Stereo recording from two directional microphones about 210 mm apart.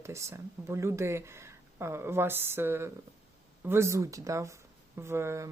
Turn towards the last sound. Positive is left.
turn(degrees=-15)  # may be behind; listen again after turning